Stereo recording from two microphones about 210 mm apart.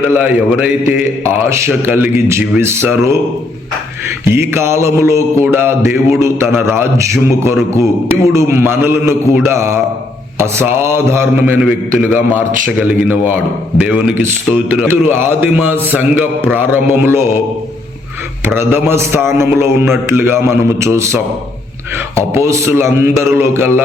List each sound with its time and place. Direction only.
0.2 s a man's voice: 5° right (ahead or behind)
4.3 s a man's voice: 10° right (ahead or behind)
18.4 s a man's voice: 10° right (ahead or behind)
22.4 s a man's voice: 15° right (ahead or behind)